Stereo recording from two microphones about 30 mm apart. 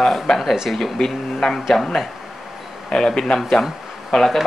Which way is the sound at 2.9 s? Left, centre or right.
Left.